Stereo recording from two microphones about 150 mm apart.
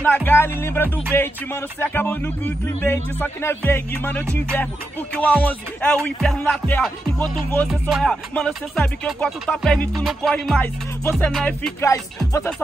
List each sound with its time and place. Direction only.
0.0 s music: 15° left (ahead or behind)
10.6 s music: 10° left (ahead or behind)
11.8 s speech: 20° left (ahead or behind)